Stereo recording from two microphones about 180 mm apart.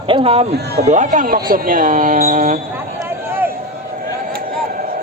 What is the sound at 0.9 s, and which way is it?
A man's voice, 45° right (ahead or behind).